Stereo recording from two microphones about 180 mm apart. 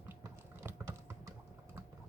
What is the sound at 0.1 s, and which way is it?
Typing, 10° right (ahead or behind).